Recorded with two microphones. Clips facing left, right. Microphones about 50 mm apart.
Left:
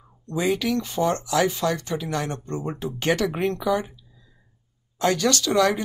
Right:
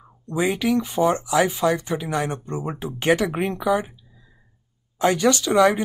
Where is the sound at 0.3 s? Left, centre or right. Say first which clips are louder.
Right 2 dB; centre.